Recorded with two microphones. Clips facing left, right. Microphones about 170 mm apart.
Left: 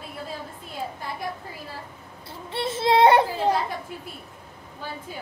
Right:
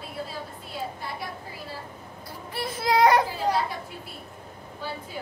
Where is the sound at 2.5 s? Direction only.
25° left (ahead or behind).